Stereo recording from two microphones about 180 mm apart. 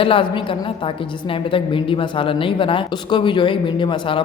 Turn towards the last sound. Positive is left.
turn(degrees=25)  # may be behind; listen again after turning